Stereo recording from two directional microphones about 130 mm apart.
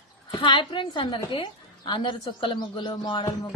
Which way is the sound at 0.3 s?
40° left (ahead or behind).